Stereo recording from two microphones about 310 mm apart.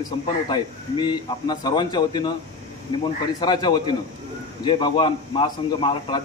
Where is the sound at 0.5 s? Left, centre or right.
Centre.